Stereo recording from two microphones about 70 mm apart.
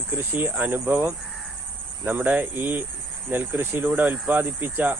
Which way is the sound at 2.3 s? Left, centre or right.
Right.